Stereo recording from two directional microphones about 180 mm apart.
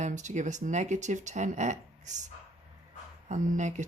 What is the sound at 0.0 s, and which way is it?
Speech, 40° right (ahead or behind).